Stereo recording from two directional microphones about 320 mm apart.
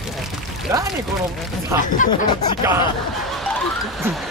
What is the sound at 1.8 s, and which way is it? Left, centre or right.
Speech, left.